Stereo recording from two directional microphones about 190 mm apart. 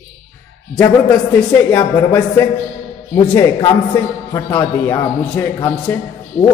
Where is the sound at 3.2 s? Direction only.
20° left (ahead or behind).